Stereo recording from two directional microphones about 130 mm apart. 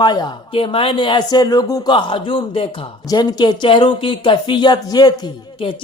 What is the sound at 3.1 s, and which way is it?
Speech, 30° left (ahead or behind).